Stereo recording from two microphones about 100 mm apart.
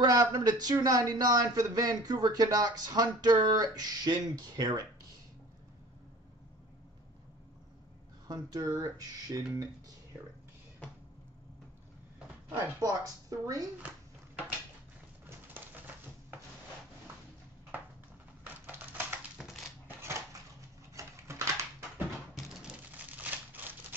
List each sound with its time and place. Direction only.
0.0 s speech: 40° right (ahead or behind)
8.3 s speech: 40° right (ahead or behind)
12.5 s speech: 30° right (ahead or behind)
15.2 s bird: 20° right (ahead or behind)
18.4 s a sound: 20° right (ahead or behind)
19.3 s crushing: centre (ahead or behind)
20.0 s a sound: 25° right (ahead or behind)
21.0 s bird: 30° right (ahead or behind)
22.8 s crumpling: 15° right (ahead or behind)